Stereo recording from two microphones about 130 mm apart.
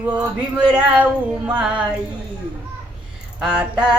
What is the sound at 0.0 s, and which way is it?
Male singing, 10° right (ahead or behind).